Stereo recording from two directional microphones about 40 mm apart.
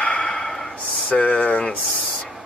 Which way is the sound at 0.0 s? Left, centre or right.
Left.